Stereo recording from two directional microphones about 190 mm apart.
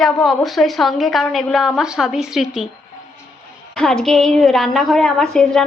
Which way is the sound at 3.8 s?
Centre (ahead or behind).